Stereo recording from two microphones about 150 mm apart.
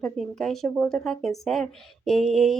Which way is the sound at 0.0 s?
Centre (ahead or behind).